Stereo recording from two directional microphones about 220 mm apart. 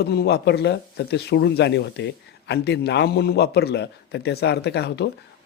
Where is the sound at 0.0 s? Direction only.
45° left (ahead or behind).